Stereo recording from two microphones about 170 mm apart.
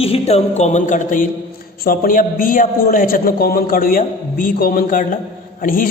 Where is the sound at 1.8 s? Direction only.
60° left (ahead or behind).